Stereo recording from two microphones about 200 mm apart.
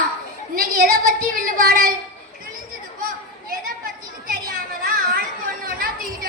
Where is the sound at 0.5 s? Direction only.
45° right (ahead or behind).